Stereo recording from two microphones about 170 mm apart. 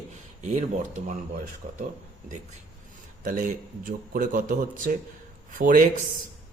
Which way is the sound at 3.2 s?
55° right (ahead or behind).